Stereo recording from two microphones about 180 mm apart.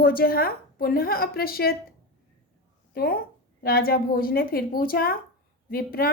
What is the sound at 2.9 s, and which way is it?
A woman's voice, 55° left (ahead or behind).